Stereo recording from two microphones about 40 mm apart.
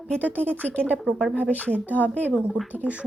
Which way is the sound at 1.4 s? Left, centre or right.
Left.